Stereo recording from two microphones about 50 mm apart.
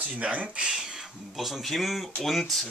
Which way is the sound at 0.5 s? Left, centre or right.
Centre.